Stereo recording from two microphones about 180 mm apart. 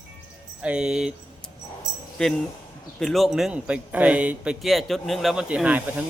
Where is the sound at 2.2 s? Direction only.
5° left (ahead or behind).